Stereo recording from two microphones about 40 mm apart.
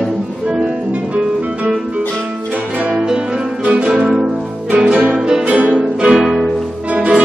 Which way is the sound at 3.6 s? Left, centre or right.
Right.